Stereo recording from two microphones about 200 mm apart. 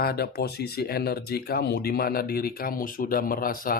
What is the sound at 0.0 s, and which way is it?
Speech, 50° left (ahead or behind).